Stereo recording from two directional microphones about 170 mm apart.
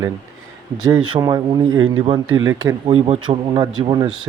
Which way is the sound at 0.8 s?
30° right (ahead or behind).